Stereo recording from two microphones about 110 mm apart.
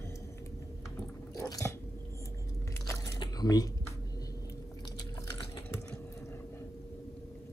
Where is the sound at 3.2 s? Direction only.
35° left (ahead or behind).